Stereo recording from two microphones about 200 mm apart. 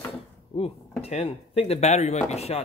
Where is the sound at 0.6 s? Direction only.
30° left (ahead or behind).